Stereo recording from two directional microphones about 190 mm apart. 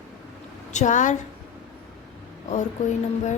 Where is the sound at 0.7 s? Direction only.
40° left (ahead or behind).